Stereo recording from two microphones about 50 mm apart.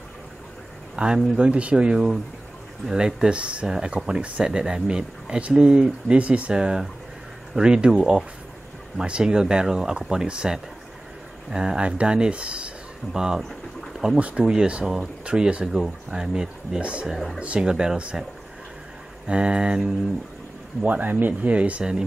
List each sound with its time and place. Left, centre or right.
0.9 s speech: centre
6.5 s speech: centre
14.1 s speech: right
14.4 s speech: centre
17.1 s speech: centre
17.6 s speech: centre
19.2 s speech: right
20.8 s speech: right